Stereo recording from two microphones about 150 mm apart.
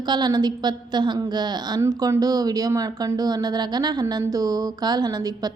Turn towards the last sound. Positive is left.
turn(degrees=-25)  # may be behind; listen again after turning